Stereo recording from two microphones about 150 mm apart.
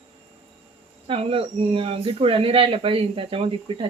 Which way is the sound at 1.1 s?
40° right (ahead or behind).